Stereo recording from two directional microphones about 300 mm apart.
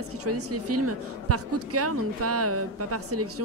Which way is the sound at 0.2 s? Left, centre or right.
Right.